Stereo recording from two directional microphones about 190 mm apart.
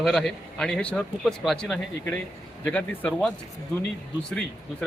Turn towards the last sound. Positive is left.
turn(degrees=5)  # may be behind; listen again after turning